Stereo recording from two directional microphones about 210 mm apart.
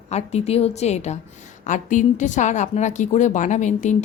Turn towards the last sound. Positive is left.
turn(degrees=35)  # may be behind; listen again after turning